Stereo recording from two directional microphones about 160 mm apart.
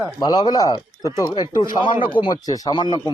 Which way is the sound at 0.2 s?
25° left (ahead or behind).